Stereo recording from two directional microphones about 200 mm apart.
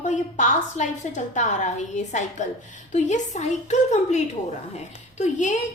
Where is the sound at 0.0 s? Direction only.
35° left (ahead or behind).